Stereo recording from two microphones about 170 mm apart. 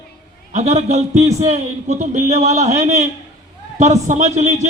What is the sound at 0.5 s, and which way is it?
A man's voice, 40° right (ahead or behind).